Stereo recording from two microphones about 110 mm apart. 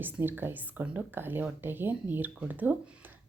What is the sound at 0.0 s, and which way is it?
A woman's voice, 20° right (ahead or behind).